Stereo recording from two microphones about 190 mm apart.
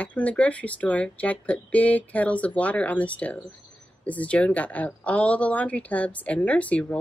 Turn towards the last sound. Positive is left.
turn(degrees=5)  # may be behind; listen again after turning